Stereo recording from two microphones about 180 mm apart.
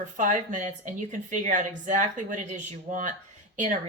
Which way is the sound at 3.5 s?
45° right (ahead or behind).